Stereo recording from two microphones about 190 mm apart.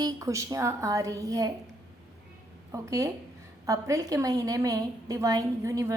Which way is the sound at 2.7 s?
15° right (ahead or behind).